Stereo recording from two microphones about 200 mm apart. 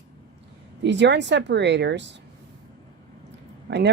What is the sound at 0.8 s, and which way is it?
Speech, 60° right (ahead or behind).